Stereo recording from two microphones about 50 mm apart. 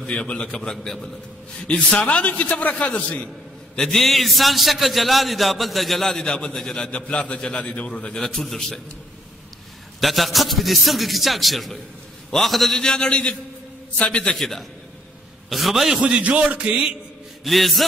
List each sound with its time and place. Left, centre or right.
0.0 s a man's voice: left
3.7 s a man's voice: centre
7.0 s a man's voice: left
8.2 s a man's voice: centre
9.9 s a man's voice: centre
12.7 s a man's voice: centre
13.9 s a man's voice: left
14.2 s a man's voice: centre
15.5 s a man's voice: centre
16.0 s a man's voice: right
17.4 s a man's voice: centre